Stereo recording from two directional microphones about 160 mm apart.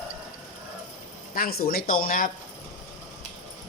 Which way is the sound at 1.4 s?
70° left (ahead or behind).